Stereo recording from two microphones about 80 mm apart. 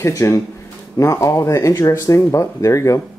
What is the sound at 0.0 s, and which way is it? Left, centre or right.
Speech, left.